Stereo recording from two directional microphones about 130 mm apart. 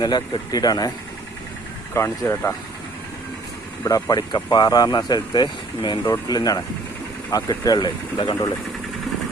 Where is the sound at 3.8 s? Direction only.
25° left (ahead or behind).